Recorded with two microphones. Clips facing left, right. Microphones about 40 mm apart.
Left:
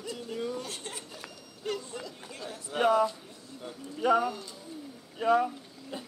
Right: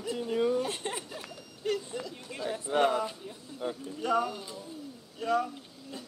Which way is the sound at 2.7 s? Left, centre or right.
Right.